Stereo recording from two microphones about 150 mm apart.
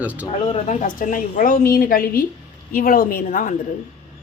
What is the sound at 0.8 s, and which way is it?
A woman's voice, 65° left (ahead or behind).